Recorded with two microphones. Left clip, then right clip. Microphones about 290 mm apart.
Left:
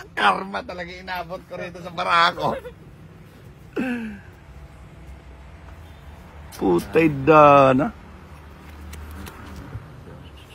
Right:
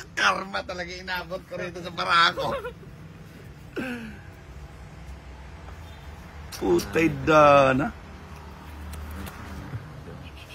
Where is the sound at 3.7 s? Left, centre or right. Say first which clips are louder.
Left 6 dB; left.